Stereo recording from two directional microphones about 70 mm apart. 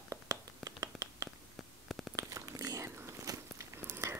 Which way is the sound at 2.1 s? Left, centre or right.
Right.